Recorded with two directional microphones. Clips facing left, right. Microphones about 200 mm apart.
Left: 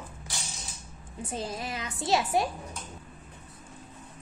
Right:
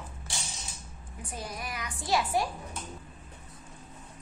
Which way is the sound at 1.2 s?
25° left (ahead or behind).